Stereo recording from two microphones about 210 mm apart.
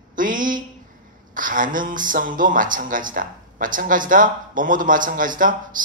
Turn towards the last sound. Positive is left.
turn(degrees=-40)  # may be behind; listen again after turning